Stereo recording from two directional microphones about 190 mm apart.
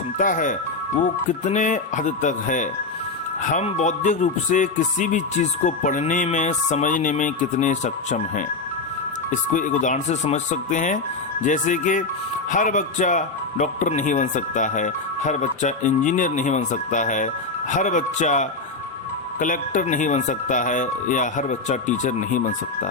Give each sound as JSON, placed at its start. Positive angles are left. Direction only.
{"t": 0.2, "sound": "speech", "side_deg": 45}